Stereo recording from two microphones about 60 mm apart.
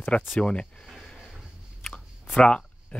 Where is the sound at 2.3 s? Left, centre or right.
Centre.